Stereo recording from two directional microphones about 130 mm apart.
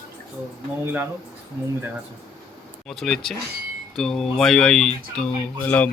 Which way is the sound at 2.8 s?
Centre (ahead or behind).